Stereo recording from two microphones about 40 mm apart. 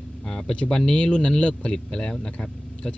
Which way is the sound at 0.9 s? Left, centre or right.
Left.